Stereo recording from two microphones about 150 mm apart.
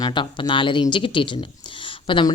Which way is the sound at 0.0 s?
30° left (ahead or behind).